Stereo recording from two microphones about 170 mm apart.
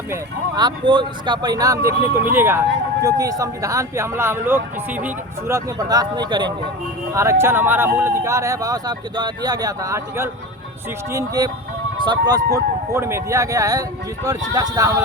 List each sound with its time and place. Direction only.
0.1 s speech: 25° right (ahead or behind)